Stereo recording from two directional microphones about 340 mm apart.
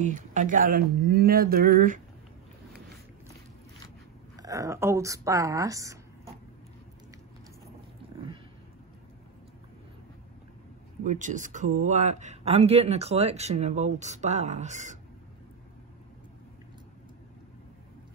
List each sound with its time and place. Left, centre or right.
0.0 s speech: right
4.4 s a woman's voice: centre
11.1 s speech: right